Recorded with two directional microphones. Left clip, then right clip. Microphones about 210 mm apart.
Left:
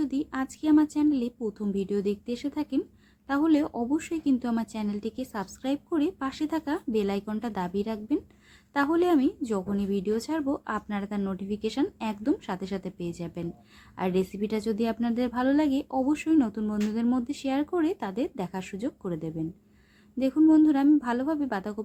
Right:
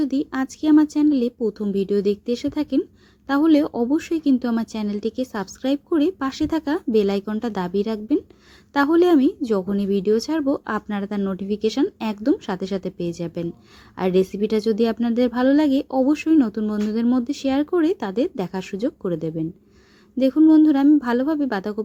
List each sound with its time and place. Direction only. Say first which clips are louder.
0.0 s speech: right 7 dB; 25° right (ahead or behind)